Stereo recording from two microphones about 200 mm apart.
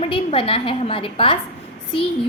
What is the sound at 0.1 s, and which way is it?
A woman's voice, 25° left (ahead or behind).